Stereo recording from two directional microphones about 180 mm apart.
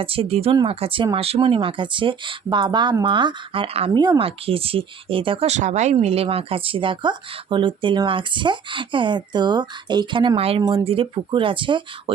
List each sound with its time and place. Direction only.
0.0 s speech: 30° right (ahead or behind)
10.6 s speech: 20° right (ahead or behind)